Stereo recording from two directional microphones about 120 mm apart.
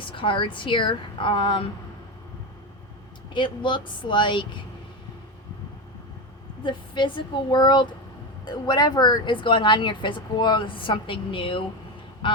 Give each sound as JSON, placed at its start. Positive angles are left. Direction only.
{"t": 0.0, "sound": "speech", "side_deg": 45}
{"t": 3.3, "sound": "speech", "side_deg": 40}
{"t": 6.7, "sound": "speech", "side_deg": 40}
{"t": 12.2, "sound": "a sound", "side_deg": 45}